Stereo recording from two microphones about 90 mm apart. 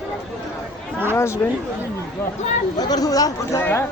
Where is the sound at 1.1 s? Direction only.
30° left (ahead or behind).